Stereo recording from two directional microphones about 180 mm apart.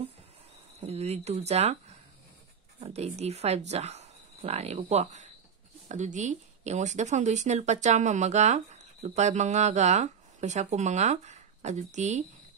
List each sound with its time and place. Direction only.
0.7 s speech: 35° right (ahead or behind)